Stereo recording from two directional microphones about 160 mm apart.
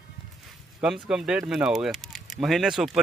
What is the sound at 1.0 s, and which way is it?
Speech, 5° right (ahead or behind).